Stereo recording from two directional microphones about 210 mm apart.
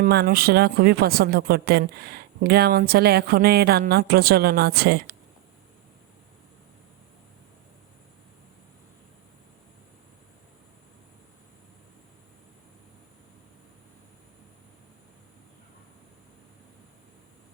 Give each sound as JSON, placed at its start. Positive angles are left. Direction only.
{"t": 0.0, "sound": "speech", "side_deg": -45}